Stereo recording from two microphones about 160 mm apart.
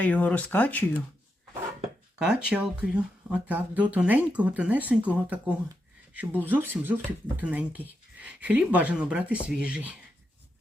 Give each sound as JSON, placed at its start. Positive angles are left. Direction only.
{"t": 0.0, "sound": "speech", "side_deg": 10}
{"t": 2.1, "sound": "speech", "side_deg": -5}